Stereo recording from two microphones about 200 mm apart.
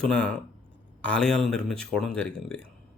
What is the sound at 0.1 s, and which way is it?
Speech, 5° left (ahead or behind).